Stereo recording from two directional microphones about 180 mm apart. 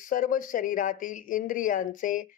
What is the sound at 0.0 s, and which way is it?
Speech, 50° left (ahead or behind).